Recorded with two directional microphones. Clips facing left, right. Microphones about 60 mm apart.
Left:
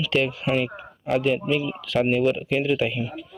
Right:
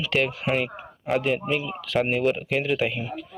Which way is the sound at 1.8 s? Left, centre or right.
Right.